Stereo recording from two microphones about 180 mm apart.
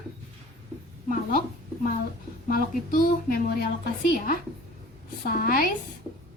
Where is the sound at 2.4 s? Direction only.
50° left (ahead or behind).